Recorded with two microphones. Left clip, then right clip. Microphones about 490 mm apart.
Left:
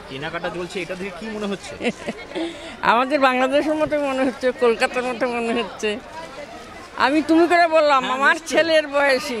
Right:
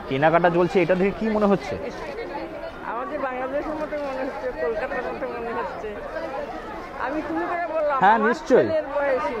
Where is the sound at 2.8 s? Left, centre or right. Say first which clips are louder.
Left 12 dB; left.